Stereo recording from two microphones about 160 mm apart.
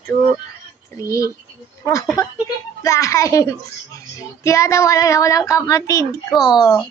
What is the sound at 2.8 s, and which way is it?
Speech, 20° left (ahead or behind).